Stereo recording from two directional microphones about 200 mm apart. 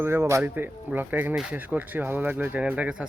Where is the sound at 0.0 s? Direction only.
10° right (ahead or behind).